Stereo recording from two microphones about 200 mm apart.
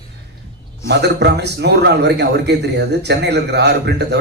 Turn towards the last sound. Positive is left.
turn(degrees=-55)  # may be behind; listen again after turning